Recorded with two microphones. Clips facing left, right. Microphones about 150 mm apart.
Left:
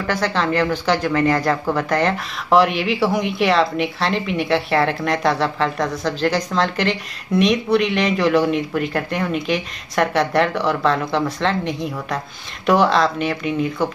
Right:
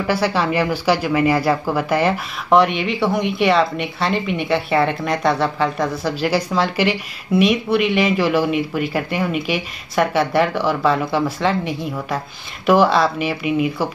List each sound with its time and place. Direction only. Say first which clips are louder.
0.0 s speech: right 2 dB; 10° right (ahead or behind)